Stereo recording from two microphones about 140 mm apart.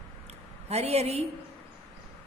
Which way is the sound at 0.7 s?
50° right (ahead or behind).